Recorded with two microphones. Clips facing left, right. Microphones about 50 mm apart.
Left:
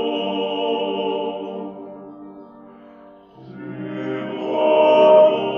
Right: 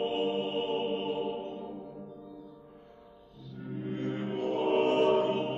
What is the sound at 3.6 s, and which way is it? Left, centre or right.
Music, left.